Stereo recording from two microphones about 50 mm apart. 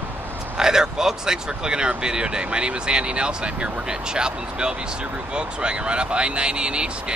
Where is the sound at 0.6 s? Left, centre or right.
Centre.